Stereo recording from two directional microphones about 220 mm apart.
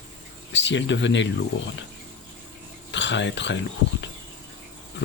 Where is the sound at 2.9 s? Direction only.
55° left (ahead or behind).